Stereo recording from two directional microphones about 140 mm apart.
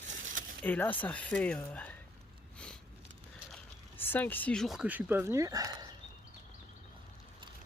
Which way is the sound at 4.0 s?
15° left (ahead or behind).